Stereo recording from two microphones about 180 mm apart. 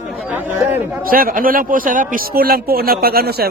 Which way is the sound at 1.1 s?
55° right (ahead or behind).